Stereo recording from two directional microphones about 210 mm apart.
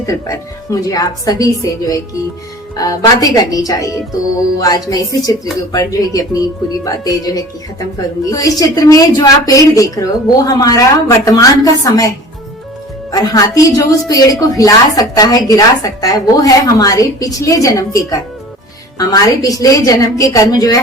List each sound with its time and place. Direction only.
0.0 s a woman's voice: 15° left (ahead or behind)
2.7 s a woman's voice: 15° left (ahead or behind)